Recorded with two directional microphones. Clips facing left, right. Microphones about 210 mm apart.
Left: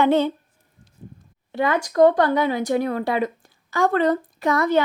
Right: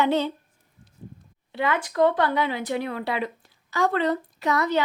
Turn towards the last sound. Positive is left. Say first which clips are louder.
# left 4 dB
turn(degrees=50)  # may be behind; listen again after turning